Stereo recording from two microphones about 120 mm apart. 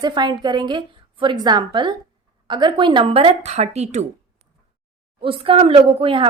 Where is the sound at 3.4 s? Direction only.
65° right (ahead or behind).